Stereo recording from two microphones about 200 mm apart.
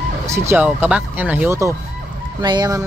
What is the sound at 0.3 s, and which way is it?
Speech, 10° right (ahead or behind).